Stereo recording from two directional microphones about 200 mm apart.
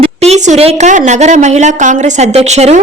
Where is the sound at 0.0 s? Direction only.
30° right (ahead or behind).